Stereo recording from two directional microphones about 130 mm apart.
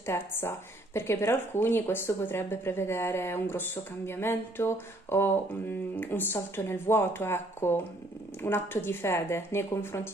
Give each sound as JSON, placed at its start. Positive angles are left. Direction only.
{"t": 0.0, "sound": "a woman's voice", "side_deg": 20}